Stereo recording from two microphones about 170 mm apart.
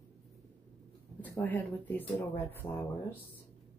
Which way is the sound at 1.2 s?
10° left (ahead or behind).